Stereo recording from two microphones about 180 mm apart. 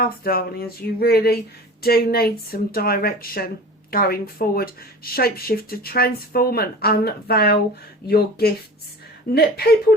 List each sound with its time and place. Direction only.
0.0 s speech: 55° left (ahead or behind)